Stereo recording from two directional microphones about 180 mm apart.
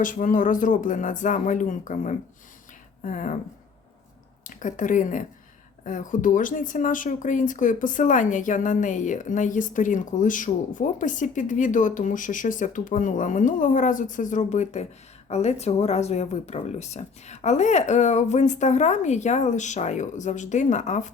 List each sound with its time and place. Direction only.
0.0 s speech: 45° left (ahead or behind)
4.4 s speech: 45° left (ahead or behind)